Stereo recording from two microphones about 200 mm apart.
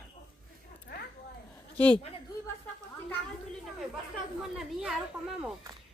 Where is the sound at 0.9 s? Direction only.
50° left (ahead or behind).